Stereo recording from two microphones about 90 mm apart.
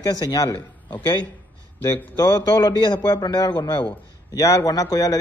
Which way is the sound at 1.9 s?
45° left (ahead or behind).